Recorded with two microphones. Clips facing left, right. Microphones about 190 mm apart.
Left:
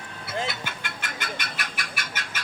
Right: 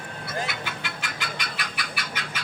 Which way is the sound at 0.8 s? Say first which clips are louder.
Even; 50° left (ahead or behind).